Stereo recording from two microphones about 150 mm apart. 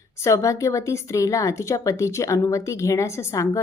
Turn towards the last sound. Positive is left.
turn(degrees=20)  # may be behind; listen again after turning